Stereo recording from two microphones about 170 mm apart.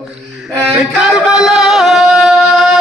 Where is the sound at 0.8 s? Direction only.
5° right (ahead or behind).